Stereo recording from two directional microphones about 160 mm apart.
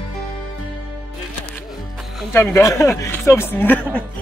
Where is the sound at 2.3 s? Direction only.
15° left (ahead or behind).